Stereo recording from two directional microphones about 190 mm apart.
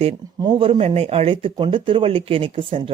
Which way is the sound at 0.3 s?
25° right (ahead or behind).